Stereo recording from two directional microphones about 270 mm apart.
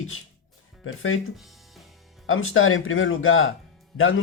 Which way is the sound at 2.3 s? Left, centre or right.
Left.